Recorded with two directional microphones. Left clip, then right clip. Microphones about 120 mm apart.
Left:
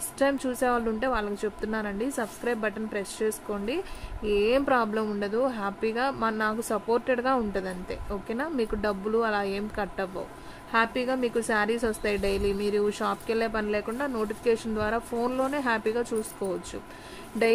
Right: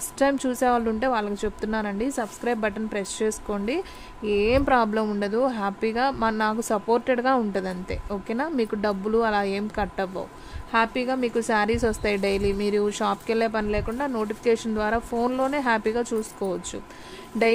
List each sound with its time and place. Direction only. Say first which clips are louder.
0.2 s speech: right 3 dB; 50° right (ahead or behind)
10.7 s speech: right 2 dB; 40° right (ahead or behind)